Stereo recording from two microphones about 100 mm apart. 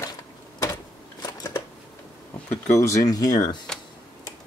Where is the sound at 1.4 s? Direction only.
45° left (ahead or behind).